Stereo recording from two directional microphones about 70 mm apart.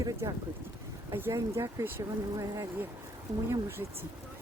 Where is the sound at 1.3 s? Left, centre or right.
Right.